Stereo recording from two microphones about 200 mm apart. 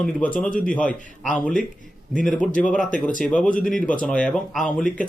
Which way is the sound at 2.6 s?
5° left (ahead or behind).